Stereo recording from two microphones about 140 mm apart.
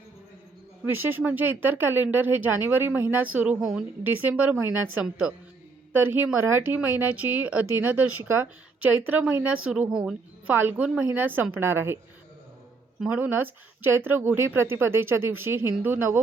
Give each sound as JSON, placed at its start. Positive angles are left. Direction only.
{"t": 0.9, "sound": "a woman's voice", "side_deg": -15}
{"t": 13.0, "sound": "a woman's voice", "side_deg": -10}